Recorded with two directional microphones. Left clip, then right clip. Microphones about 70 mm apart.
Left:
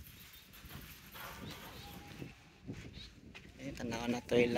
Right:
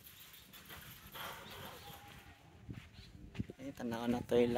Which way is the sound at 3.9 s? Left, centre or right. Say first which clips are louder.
Left 1 dB; right.